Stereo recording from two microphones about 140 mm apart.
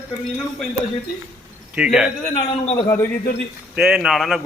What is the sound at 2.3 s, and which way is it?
Speech, 40° left (ahead or behind).